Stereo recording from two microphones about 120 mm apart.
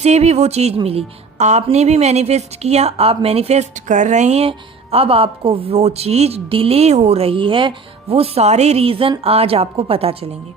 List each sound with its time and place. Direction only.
0.0 s speech: 65° right (ahead or behind); by 7.7 s 45° right (ahead or behind)
8.1 s a woman's voice: 55° right (ahead or behind)